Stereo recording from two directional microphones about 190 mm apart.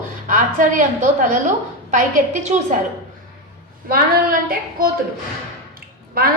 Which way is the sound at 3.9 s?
50° right (ahead or behind).